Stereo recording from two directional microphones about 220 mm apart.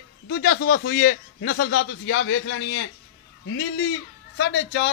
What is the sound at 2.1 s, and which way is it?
Speech, 60° left (ahead or behind).